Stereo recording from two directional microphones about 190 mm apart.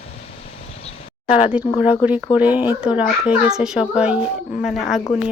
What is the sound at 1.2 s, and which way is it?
Speech, 5° right (ahead or behind).